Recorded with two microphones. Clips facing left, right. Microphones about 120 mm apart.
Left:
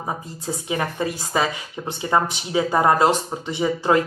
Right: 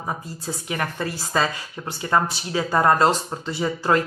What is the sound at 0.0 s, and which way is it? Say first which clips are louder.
A woman's voice: left 1 dB; 20° left (ahead or behind).